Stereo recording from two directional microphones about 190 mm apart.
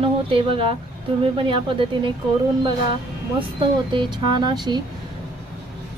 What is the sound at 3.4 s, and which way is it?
Speech, 25° right (ahead or behind).